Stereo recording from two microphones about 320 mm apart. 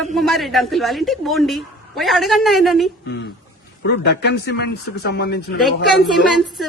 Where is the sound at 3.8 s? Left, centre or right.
Left.